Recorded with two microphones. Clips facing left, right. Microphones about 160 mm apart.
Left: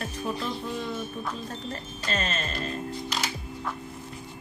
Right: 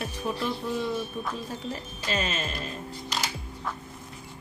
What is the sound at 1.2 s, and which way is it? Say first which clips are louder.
Speech: right 1 dB; 5° right (ahead or behind).